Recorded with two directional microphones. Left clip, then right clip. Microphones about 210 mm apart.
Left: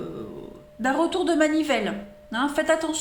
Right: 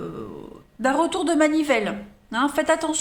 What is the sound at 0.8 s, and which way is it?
A woman's voice, 30° right (ahead or behind).